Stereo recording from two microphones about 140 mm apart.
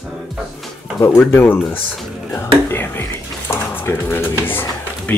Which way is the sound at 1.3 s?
15° left (ahead or behind).